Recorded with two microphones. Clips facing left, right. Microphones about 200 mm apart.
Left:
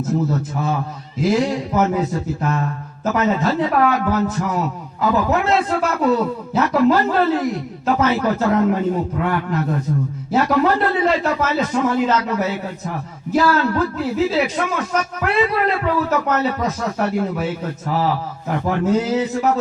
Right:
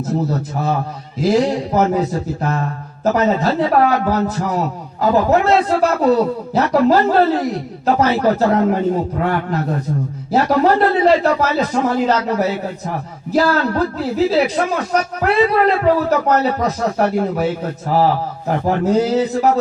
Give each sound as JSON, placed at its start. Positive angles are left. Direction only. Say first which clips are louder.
{"t": 0.0, "sound": "a man's voice", "louder": "even", "side_deg": -35}